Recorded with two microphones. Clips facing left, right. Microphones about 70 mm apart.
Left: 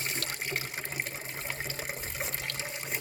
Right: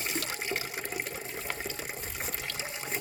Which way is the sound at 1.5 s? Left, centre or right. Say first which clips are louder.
Even; left.